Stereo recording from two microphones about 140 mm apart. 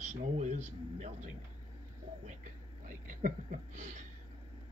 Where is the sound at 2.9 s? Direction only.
65° right (ahead or behind).